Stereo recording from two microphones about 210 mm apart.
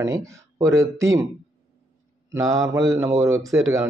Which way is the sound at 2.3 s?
15° right (ahead or behind).